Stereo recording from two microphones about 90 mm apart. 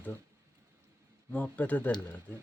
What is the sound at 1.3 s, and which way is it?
Speech, 15° left (ahead or behind).